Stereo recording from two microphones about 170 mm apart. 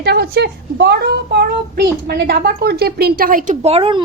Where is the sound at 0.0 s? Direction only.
75° right (ahead or behind).